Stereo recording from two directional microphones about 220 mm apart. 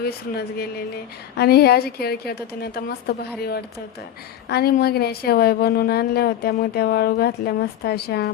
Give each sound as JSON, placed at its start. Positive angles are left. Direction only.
{"t": 0.0, "sound": "a woman's voice", "side_deg": 45}